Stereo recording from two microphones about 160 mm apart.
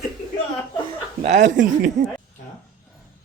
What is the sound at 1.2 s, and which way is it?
Speech, 50° right (ahead or behind).